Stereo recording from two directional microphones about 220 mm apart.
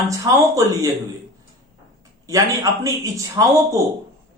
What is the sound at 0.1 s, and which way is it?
Speech, 15° right (ahead or behind).